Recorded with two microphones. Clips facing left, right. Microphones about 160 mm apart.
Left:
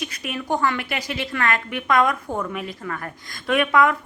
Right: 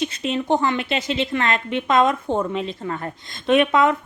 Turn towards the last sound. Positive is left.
turn(degrees=-20)  # may be behind; listen again after turning